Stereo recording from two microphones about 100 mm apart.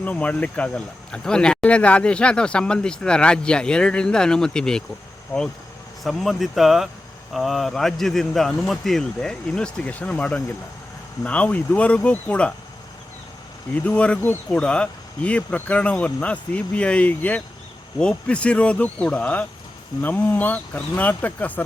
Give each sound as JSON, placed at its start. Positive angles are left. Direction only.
{"t": 0.0, "sound": "speech", "side_deg": 15}
{"t": 6.0, "sound": "speech", "side_deg": 0}
{"t": 13.7, "sound": "speech", "side_deg": 10}